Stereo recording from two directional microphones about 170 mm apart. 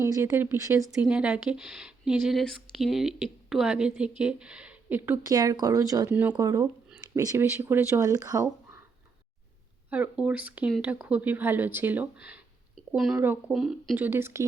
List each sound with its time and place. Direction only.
0.0 s speech: 15° right (ahead or behind)
1.0 s speech: 5° right (ahead or behind)
5.3 s speech: 25° right (ahead or behind)
9.9 s speech: 10° right (ahead or behind)